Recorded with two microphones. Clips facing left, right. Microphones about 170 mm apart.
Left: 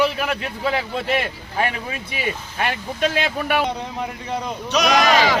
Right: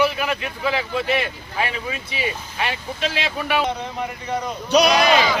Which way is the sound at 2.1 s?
50° left (ahead or behind).